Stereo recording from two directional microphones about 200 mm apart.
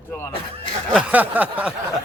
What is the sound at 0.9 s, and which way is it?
Speech, 5° right (ahead or behind).